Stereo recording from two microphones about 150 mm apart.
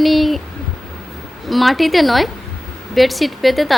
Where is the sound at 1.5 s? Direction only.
Centre (ahead or behind).